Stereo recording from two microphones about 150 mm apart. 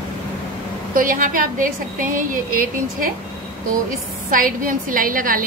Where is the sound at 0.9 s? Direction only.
65° right (ahead or behind).